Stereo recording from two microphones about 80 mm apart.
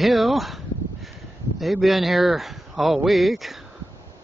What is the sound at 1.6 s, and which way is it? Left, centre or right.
A man's voice, centre.